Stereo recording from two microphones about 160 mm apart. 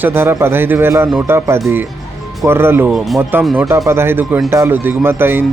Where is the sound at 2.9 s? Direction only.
Centre (ahead or behind).